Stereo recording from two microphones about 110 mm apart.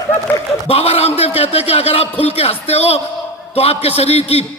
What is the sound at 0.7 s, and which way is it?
A man's voice, 65° left (ahead or behind).